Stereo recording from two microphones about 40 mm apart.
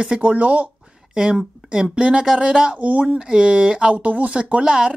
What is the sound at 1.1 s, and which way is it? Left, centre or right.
Speech, centre.